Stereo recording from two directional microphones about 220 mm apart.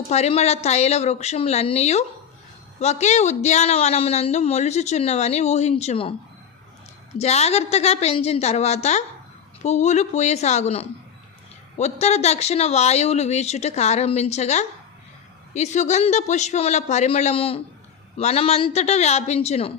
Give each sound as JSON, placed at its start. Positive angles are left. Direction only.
{"t": 0.1, "sound": "a man's voice", "side_deg": 30}
{"t": 7.2, "sound": "a man's voice", "side_deg": 30}